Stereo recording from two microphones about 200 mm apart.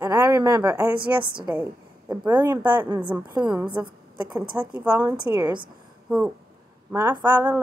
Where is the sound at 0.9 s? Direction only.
50° right (ahead or behind).